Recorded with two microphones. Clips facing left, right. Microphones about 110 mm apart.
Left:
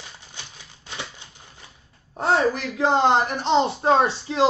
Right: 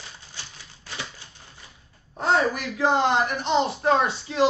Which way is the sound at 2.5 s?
25° left (ahead or behind).